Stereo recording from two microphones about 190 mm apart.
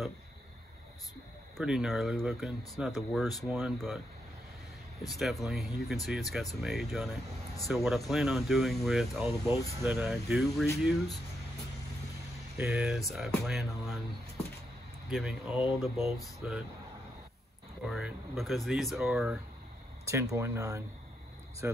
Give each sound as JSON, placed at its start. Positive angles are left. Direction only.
{"t": 1.6, "sound": "speech", "side_deg": -5}
{"t": 5.2, "sound": "speech", "side_deg": 0}
{"t": 12.5, "sound": "speech", "side_deg": -5}
{"t": 15.0, "sound": "speech", "side_deg": 0}
{"t": 17.8, "sound": "speech", "side_deg": 0}
{"t": 20.1, "sound": "speech", "side_deg": -15}